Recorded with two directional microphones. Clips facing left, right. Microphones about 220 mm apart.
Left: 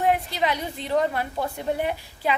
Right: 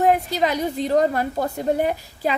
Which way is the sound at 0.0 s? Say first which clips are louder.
Right 4 dB; 40° right (ahead or behind).